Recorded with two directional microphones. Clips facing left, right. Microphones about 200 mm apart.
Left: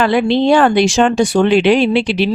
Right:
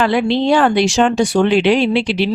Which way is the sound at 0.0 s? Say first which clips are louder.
Left 2 dB; 55° left (ahead or behind).